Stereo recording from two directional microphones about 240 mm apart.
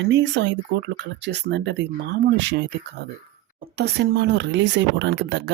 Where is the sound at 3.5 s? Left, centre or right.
Right.